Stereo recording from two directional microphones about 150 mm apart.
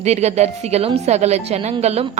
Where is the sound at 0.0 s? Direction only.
45° right (ahead or behind).